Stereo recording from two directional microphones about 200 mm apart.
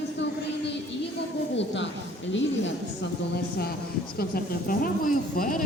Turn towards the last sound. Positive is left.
turn(degrees=45)  # may be behind; listen again after turning